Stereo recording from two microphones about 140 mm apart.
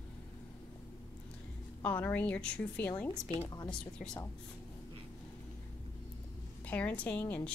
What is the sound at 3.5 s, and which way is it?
Speech, 30° left (ahead or behind).